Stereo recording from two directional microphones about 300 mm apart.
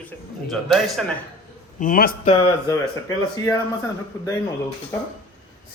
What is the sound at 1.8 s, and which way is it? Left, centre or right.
Speech, left.